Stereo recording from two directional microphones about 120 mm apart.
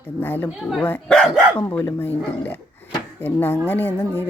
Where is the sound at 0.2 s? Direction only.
15° left (ahead or behind).